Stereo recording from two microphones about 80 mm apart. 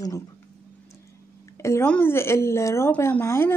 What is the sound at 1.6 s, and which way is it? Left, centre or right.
Speech, left.